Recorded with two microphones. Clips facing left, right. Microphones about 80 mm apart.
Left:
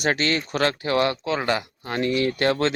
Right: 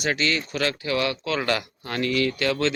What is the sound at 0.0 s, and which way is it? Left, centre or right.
A man's voice, left.